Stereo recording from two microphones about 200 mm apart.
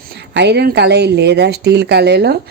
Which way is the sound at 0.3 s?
60° right (ahead or behind).